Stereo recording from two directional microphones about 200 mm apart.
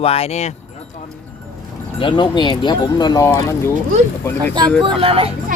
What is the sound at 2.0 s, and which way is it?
Speech, 25° left (ahead or behind).